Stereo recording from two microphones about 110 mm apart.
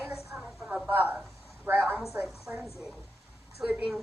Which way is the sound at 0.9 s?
15° right (ahead or behind).